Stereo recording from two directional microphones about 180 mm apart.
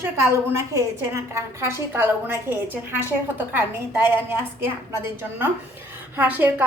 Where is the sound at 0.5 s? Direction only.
15° right (ahead or behind).